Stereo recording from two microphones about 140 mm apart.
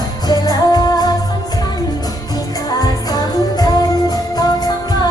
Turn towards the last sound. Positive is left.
turn(degrees=30)  # may be behind; listen again after turning